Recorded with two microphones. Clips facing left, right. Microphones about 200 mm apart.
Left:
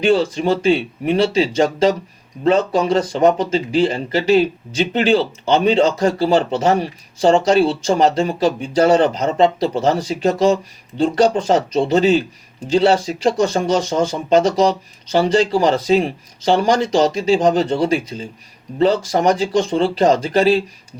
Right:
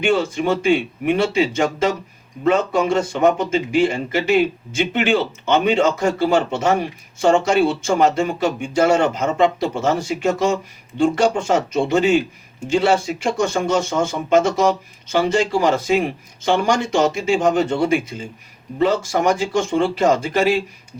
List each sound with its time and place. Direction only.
0.0 s speech: 35° left (ahead or behind)
19.4 s speech: 35° left (ahead or behind)